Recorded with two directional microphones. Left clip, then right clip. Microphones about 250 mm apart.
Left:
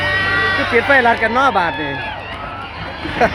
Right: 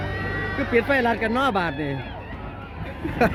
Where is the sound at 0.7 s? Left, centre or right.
Centre.